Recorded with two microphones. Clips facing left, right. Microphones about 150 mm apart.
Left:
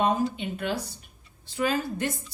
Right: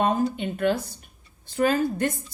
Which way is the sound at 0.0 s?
50° right (ahead or behind).